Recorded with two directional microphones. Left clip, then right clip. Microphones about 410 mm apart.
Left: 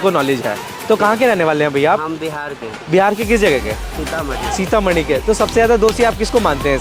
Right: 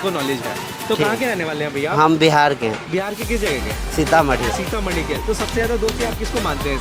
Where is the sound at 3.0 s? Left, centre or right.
Left.